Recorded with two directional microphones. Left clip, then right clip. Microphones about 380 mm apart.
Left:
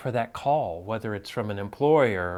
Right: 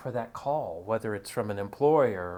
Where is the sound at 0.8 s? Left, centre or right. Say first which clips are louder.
Right 1 dB; centre.